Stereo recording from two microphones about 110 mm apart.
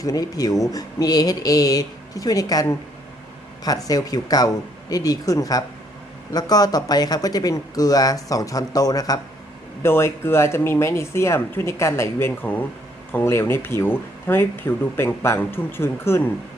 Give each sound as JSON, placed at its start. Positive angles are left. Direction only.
{"t": 0.0, "sound": "speech", "side_deg": 35}
{"t": 9.8, "sound": "speech", "side_deg": 20}